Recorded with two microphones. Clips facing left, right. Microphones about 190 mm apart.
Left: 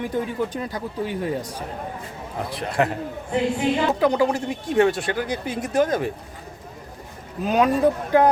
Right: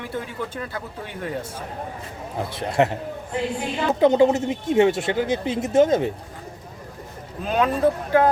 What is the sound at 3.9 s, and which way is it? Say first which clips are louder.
Speech: right 3 dB; 25° right (ahead or behind).